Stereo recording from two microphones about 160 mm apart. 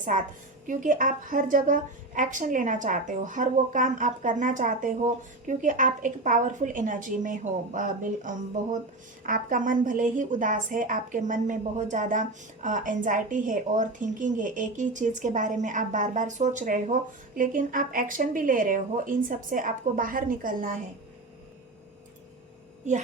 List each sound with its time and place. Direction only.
0.0 s a woman's voice: 55° right (ahead or behind)